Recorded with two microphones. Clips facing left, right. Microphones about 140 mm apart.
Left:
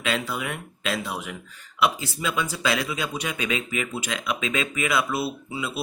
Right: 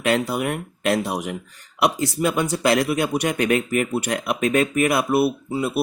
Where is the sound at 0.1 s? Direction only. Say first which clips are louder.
Right 7 dB; 60° right (ahead or behind).